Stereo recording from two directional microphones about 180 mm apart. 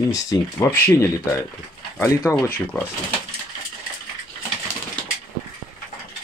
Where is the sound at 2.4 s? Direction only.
10° left (ahead or behind).